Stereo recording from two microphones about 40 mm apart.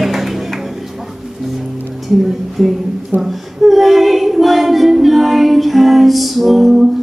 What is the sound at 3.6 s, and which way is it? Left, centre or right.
Female singing, centre.